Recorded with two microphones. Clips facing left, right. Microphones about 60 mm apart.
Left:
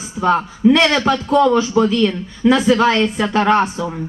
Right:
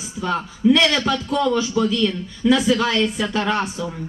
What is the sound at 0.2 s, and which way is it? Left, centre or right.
A woman's voice, left.